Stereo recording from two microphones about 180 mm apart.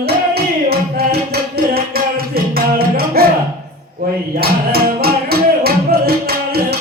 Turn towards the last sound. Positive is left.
turn(degrees=-60)  # may be behind; listen again after turning